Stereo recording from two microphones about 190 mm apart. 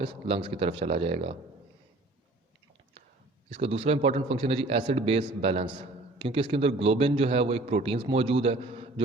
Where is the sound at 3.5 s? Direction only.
30° right (ahead or behind).